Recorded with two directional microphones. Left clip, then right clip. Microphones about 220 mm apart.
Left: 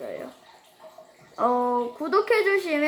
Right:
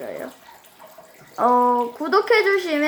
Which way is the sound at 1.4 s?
10° right (ahead or behind).